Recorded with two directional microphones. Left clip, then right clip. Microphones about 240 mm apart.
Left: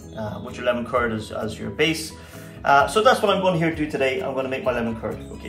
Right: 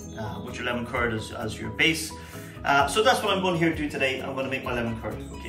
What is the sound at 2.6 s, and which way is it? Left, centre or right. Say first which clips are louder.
A man's voice: left 5 dB; centre.